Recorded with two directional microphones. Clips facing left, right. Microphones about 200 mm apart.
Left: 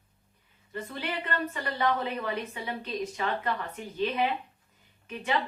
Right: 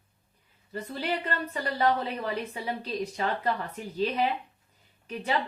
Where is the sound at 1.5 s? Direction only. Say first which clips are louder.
Right 4 dB; 35° right (ahead or behind).